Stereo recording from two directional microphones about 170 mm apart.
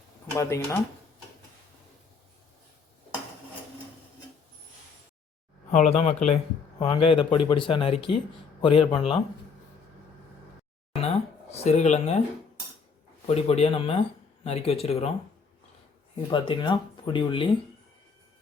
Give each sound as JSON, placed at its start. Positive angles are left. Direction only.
{"t": 0.3, "sound": "speech", "side_deg": 15}
{"t": 5.7, "sound": "speech", "side_deg": 40}
{"t": 11.0, "sound": "a sound", "side_deg": 40}
{"t": 13.2, "sound": "speech", "side_deg": 35}
{"t": 16.3, "sound": "speech", "side_deg": 30}